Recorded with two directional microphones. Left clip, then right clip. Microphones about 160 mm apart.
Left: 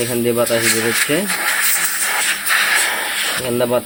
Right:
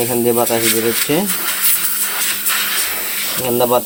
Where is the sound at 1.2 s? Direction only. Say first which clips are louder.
Left 3 dB; centre (ahead or behind).